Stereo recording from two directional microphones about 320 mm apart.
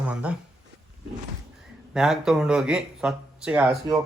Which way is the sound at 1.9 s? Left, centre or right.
Centre.